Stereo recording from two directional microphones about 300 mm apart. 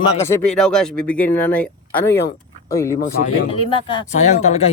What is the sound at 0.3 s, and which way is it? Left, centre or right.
Speech, centre.